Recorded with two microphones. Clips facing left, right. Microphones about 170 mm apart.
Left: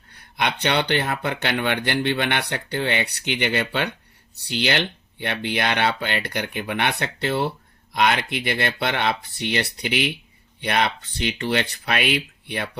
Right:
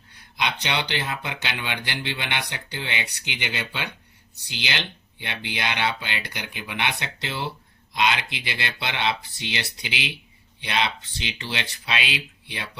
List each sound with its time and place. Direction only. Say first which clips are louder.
0.1 s speech: left 3 dB; 55° left (ahead or behind)